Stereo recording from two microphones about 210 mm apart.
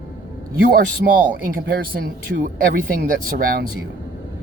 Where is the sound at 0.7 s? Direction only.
45° right (ahead or behind).